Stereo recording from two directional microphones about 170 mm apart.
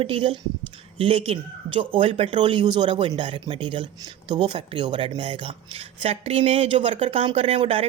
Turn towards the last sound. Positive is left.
turn(degrees=-35)  # may be behind; listen again after turning